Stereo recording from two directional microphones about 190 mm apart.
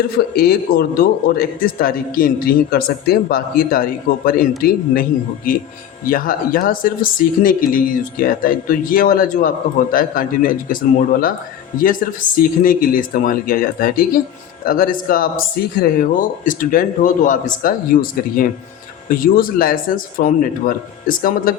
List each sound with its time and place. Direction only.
0.2 s speech: 55° left (ahead or behind)
6.1 s speech: 45° left (ahead or behind)
11.8 s speech: 45° left (ahead or behind)